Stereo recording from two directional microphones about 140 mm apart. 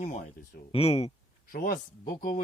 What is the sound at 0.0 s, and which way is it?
Speech, 55° left (ahead or behind).